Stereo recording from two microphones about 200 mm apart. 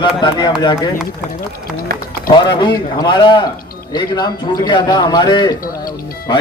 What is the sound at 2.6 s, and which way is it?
A man's voice, 20° left (ahead or behind).